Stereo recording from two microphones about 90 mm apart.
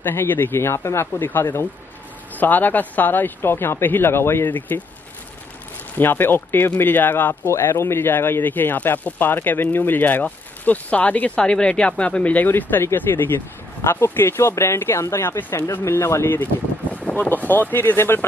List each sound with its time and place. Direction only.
0.0 s speech: 25° left (ahead or behind)
5.9 s speech: 25° left (ahead or behind)
16.9 s speech: 15° left (ahead or behind)